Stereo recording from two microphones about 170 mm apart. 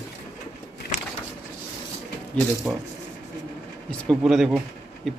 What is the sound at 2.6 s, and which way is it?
Speech, centre (ahead or behind).